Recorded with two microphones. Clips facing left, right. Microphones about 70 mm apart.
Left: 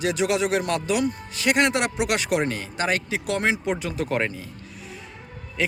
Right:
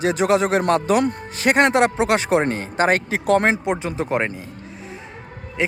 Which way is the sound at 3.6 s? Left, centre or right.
Right.